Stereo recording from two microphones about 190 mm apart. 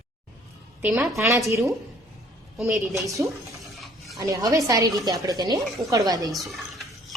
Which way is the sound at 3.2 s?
Centre (ahead or behind).